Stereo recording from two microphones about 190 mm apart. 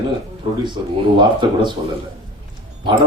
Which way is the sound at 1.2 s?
25° right (ahead or behind).